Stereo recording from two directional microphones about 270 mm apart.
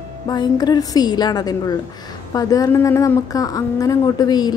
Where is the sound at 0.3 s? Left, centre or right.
Centre.